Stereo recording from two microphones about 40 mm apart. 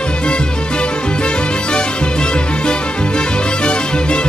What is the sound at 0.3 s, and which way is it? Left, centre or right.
Music, left.